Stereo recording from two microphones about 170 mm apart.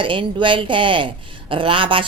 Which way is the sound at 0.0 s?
30° right (ahead or behind).